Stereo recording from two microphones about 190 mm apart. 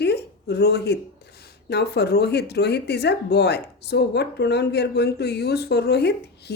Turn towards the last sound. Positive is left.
turn(degrees=60)  # may be behind; listen again after turning